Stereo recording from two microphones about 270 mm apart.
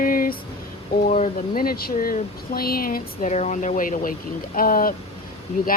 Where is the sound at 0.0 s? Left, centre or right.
Left.